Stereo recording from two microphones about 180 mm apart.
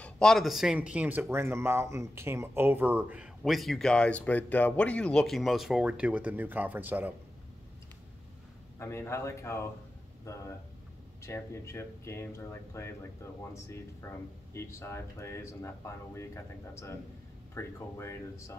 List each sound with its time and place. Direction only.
0.0 s speech: 5° left (ahead or behind)
8.7 s speech: 15° left (ahead or behind)
14.0 s speech: 15° left (ahead or behind)